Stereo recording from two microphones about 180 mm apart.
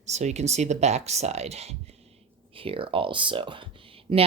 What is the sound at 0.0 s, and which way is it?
Speech, 40° right (ahead or behind).